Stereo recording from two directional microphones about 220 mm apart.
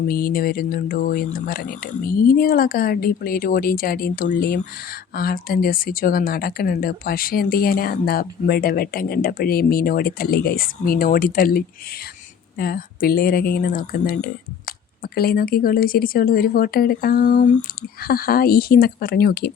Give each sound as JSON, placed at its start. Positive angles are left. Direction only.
{"t": 0.1, "sound": "speech", "side_deg": 40}